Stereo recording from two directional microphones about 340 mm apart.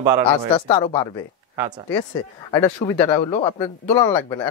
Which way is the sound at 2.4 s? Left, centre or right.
Centre.